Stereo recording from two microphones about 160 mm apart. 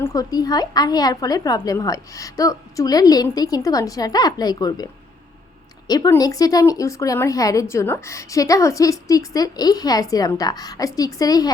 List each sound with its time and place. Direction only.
0.0 s speech: 20° left (ahead or behind)
5.9 s speech: 25° left (ahead or behind)